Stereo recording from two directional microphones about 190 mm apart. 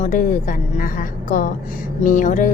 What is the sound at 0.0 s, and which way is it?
A woman's voice, 40° left (ahead or behind).